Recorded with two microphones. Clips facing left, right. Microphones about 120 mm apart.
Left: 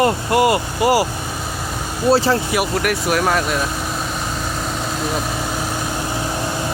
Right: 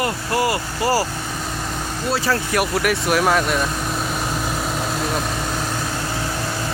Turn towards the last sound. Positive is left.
turn(degrees=0)  # may be behind; listen again after turning